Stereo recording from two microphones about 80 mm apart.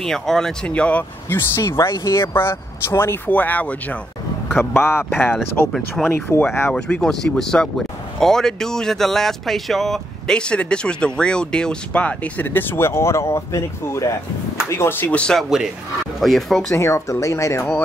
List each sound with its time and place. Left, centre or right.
0.0 s speech: centre
1.3 s speech: left
6.7 s speech: centre; by 15.0 s left
15.0 s speech: centre
15.3 s speech: centre
16.7 s speech: left